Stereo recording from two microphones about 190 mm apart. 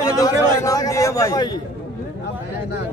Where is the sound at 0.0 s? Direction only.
20° left (ahead or behind).